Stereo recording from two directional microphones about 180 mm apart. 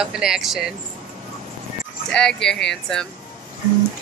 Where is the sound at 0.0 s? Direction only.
5° right (ahead or behind).